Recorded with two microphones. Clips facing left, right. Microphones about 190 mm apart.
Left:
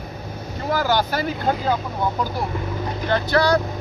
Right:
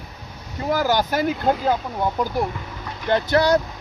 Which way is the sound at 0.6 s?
15° right (ahead or behind).